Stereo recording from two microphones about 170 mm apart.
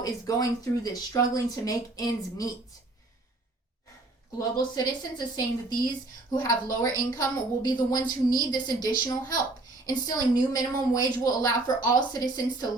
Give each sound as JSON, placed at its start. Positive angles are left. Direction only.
{"t": 0.0, "sound": "a woman's voice", "side_deg": 20}
{"t": 4.4, "sound": "a woman's voice", "side_deg": 20}
{"t": 6.3, "sound": "a woman's voice", "side_deg": 20}